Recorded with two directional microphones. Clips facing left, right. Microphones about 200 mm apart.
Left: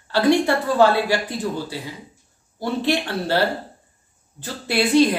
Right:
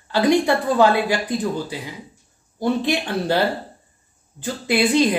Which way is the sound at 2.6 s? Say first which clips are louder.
Right 1 dB; 15° right (ahead or behind).